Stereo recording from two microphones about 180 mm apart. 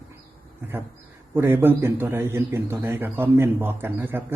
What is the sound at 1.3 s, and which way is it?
A man's voice, 10° right (ahead or behind).